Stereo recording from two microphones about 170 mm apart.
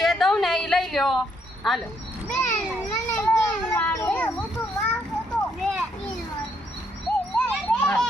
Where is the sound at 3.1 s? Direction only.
15° left (ahead or behind).